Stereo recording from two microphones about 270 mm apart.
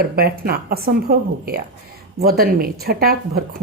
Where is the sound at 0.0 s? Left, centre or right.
Right.